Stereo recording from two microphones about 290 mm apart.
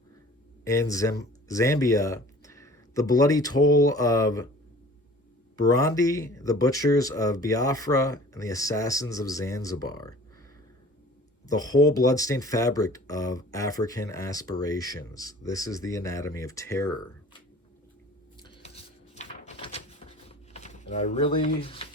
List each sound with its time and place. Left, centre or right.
0.6 s speech: centre
5.5 s speech: centre
11.4 s speech: centre
18.4 s a sound: centre